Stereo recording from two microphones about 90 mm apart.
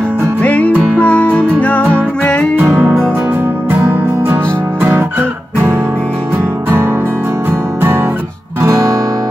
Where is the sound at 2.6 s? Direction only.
20° right (ahead or behind).